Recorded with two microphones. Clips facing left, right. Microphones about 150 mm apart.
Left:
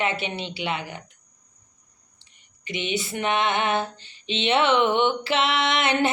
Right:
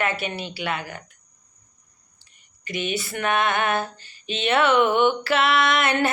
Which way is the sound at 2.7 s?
20° left (ahead or behind).